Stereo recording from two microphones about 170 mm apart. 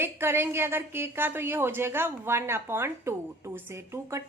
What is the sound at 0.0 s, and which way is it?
Speech, 15° right (ahead or behind).